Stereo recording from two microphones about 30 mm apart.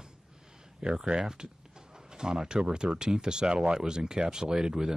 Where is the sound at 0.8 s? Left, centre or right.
Right.